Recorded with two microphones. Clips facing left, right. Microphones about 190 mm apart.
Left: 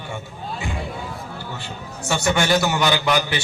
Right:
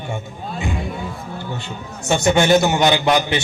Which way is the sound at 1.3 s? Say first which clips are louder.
Right 4 dB; 25° right (ahead or behind).